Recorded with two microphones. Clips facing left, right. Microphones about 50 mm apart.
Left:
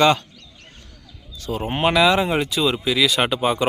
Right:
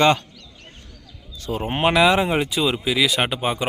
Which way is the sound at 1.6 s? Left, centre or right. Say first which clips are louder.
Even; centre.